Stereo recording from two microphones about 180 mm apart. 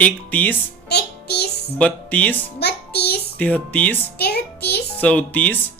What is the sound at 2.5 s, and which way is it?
Music, 65° left (ahead or behind).